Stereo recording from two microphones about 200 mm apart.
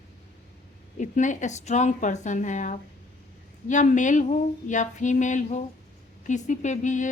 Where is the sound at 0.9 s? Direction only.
40° left (ahead or behind).